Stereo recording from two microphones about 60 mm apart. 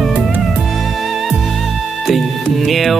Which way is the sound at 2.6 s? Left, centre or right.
Centre.